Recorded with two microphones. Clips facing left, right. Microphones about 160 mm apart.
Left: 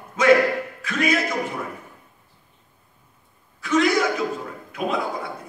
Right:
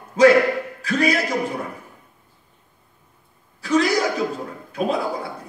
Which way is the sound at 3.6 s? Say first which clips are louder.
Right 1 dB; 35° right (ahead or behind).